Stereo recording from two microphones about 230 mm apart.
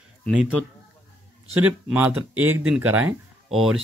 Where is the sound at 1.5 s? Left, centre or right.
Centre.